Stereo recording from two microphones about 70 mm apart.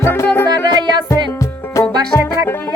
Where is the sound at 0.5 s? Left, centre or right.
Right.